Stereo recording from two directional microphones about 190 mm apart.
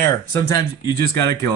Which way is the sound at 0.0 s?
15° left (ahead or behind).